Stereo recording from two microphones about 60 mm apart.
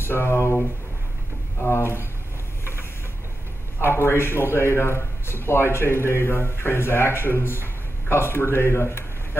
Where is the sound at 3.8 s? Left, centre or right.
Left.